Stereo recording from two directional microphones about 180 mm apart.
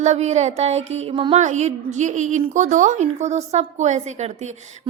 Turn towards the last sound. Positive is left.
turn(degrees=-40)  # may be behind; listen again after turning